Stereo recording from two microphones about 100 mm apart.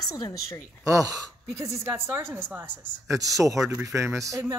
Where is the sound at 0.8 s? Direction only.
35° right (ahead or behind).